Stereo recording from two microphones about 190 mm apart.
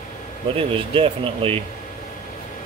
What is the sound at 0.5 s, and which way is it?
Speech, 30° right (ahead or behind).